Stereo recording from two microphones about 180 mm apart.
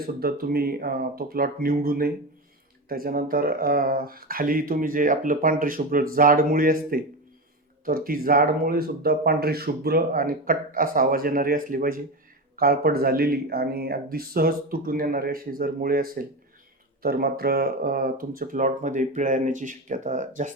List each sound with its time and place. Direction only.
0.2 s speech: 55° right (ahead or behind)